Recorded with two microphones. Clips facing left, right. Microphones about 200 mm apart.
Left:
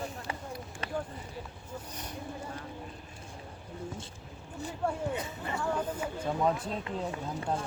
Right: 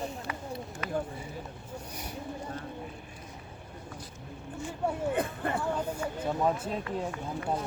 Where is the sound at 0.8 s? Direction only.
30° left (ahead or behind).